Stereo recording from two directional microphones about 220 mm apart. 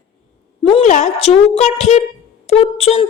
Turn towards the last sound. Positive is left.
turn(degrees=25)  # may be behind; listen again after turning